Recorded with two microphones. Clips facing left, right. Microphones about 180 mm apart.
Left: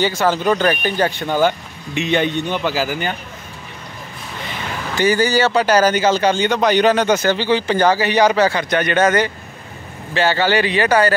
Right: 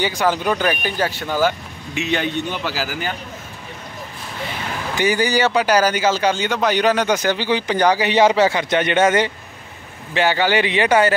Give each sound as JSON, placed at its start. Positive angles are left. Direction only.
{"t": 0.0, "sound": "a man's voice", "side_deg": -15}
{"t": 4.9, "sound": "speech", "side_deg": -15}